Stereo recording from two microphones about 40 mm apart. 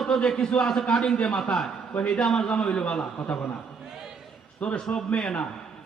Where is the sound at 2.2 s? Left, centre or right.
Centre.